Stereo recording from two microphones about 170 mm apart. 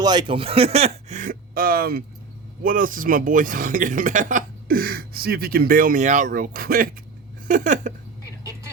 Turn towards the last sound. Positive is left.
turn(degrees=-50)  # may be behind; listen again after turning